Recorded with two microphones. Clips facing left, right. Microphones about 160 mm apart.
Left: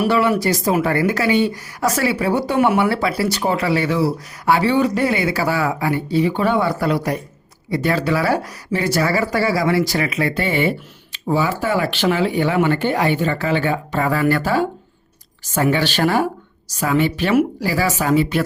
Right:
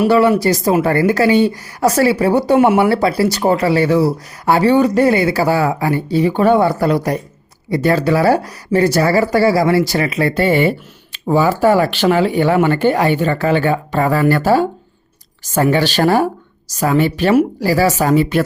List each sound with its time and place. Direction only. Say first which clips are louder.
0.1 s speech: right 5 dB; 35° right (ahead or behind)
2.6 s speech: right 5 dB; 30° right (ahead or behind); by 18.4 s 45° right (ahead or behind)